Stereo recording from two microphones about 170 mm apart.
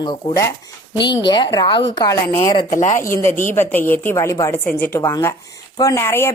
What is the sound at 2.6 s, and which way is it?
Speech, 45° left (ahead or behind).